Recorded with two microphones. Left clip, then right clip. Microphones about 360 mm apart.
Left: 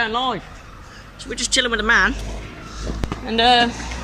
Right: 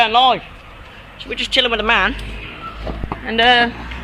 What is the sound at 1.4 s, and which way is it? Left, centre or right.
Speech, centre.